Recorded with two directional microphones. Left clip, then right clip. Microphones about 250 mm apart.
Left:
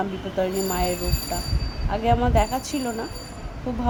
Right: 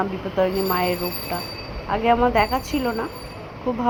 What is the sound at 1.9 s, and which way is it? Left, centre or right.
Speech, centre.